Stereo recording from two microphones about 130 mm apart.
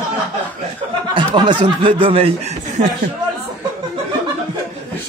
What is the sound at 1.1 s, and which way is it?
Speech, 35° right (ahead or behind).